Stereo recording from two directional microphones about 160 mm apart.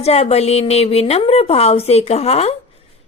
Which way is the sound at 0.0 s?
40° left (ahead or behind).